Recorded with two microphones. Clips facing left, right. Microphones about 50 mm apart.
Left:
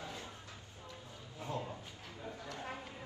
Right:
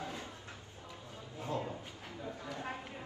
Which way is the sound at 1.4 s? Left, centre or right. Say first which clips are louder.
Right 3 dB; right.